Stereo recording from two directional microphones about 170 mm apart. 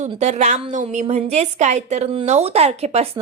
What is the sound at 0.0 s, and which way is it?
A woman's voice, 40° right (ahead or behind).